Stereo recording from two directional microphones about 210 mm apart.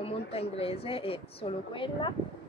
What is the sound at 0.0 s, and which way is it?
A woman's voice, 25° left (ahead or behind).